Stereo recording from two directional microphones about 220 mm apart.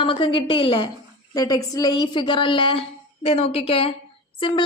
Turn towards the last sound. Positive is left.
turn(degrees=20)  # may be behind; listen again after turning